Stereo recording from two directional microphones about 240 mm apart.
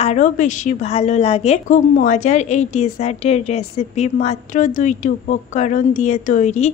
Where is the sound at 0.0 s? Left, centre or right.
Left.